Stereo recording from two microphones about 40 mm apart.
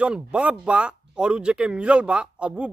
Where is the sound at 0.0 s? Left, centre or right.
Right.